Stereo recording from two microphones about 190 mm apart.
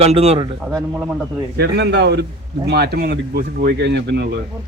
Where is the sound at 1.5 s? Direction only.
60° right (ahead or behind).